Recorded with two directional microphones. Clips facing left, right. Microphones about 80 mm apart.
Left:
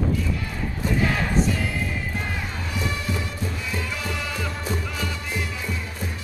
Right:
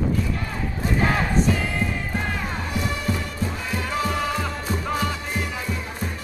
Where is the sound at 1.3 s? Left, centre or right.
Centre.